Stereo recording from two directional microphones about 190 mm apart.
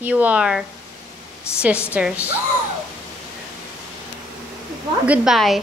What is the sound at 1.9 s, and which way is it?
Speech, 5° right (ahead or behind).